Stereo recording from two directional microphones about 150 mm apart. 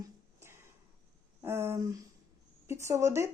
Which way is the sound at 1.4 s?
15° right (ahead or behind).